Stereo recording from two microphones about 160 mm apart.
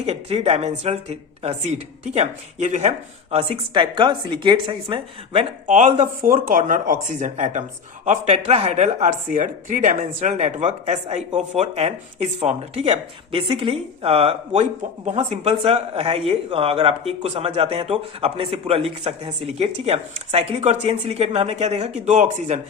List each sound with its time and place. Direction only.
0.0 s speech: 40° right (ahead or behind)
3.3 s speech: 35° right (ahead or behind)
5.6 s speech: 50° right (ahead or behind)